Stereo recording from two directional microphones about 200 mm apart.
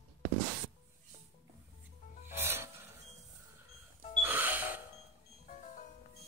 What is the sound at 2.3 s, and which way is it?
Music, 10° right (ahead or behind).